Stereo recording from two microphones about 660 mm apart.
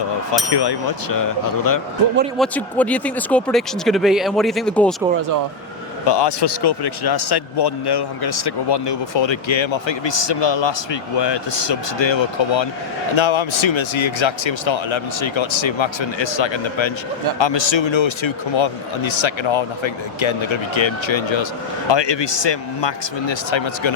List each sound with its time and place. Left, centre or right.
0.5 s speech: left
2.4 s speech: centre
6.1 s speech: left